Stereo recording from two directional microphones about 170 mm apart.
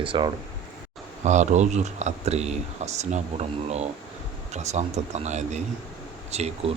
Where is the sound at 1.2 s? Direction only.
45° right (ahead or behind).